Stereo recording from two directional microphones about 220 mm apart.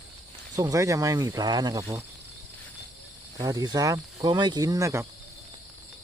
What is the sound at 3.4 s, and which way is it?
Speech, 15° right (ahead or behind).